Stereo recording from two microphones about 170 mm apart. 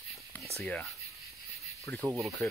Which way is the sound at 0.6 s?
5° left (ahead or behind).